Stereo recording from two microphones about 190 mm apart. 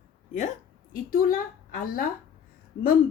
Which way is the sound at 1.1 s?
50° left (ahead or behind).